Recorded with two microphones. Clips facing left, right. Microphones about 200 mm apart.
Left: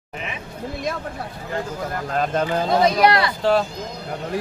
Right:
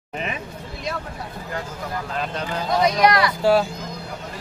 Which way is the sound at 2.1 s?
45° left (ahead or behind).